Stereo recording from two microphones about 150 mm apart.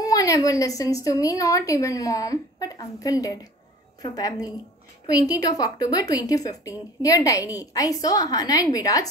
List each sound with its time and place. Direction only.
0.0 s a woman's voice: 25° left (ahead or behind)